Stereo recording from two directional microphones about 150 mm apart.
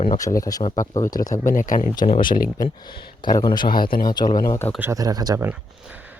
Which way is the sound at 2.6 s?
30° left (ahead or behind).